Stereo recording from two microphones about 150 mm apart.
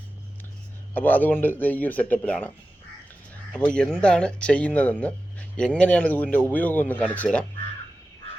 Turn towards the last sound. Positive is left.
turn(degrees=10)  # may be behind; listen again after turning